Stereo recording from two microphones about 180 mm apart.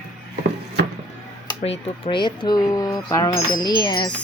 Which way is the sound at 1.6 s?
30° left (ahead or behind).